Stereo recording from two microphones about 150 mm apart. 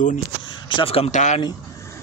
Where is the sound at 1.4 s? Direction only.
20° left (ahead or behind).